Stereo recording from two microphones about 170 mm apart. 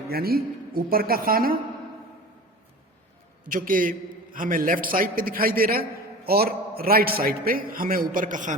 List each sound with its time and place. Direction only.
0.1 s a man's voice: 65° right (ahead or behind)
3.4 s a man's voice: 55° right (ahead or behind)